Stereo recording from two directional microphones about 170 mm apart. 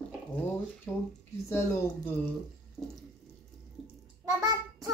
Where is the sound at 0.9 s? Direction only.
10° left (ahead or behind).